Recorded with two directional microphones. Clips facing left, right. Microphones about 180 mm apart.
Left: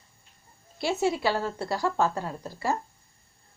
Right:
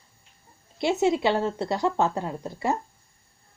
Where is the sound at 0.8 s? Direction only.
20° right (ahead or behind).